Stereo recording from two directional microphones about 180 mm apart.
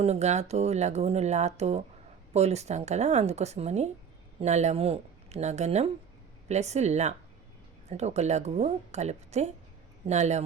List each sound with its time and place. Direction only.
0.0 s speech: 40° right (ahead or behind)